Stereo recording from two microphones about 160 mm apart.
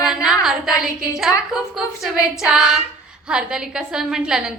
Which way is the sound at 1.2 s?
Centre (ahead or behind).